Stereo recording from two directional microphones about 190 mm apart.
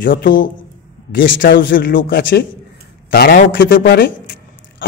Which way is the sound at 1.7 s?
50° left (ahead or behind).